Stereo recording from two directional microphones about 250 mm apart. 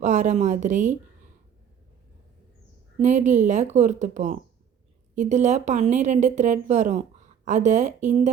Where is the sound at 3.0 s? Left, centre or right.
Right.